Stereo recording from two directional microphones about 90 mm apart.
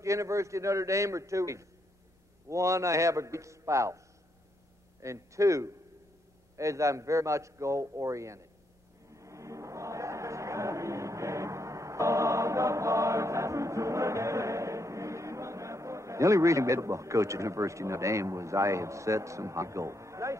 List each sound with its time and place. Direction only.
0.0 s a man's voice: 35° right (ahead or behind)
5.0 s a man's voice: 35° right (ahead or behind)
9.1 s a sound: 35° right (ahead or behind)